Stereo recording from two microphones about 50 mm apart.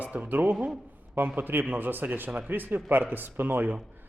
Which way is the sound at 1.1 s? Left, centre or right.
Right.